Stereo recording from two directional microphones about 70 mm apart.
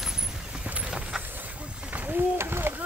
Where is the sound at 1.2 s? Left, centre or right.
Right.